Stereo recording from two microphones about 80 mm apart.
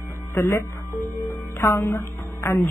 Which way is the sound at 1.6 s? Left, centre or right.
Left.